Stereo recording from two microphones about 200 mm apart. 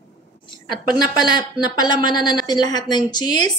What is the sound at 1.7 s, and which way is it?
A woman's voice, 20° left (ahead or behind).